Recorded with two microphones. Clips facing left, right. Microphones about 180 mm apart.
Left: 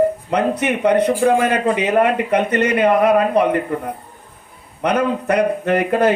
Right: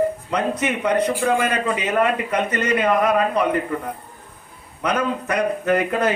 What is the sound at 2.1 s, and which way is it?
Speech, 60° left (ahead or behind).